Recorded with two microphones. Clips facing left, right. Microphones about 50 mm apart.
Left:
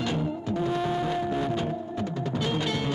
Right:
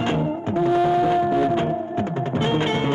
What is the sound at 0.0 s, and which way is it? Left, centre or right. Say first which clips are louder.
Music: right 6 dB; right.